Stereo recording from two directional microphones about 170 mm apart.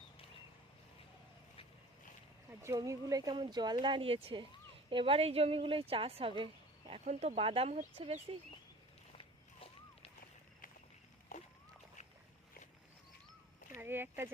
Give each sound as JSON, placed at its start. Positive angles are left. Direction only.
{"t": 2.5, "sound": "speech", "side_deg": -15}
{"t": 9.1, "sound": "walk", "side_deg": 35}
{"t": 13.7, "sound": "speech", "side_deg": -15}